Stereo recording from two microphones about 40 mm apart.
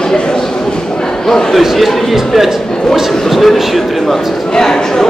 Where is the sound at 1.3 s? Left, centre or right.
Centre.